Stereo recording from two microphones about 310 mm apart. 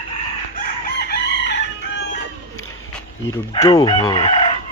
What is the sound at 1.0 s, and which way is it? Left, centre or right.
Chicken, left.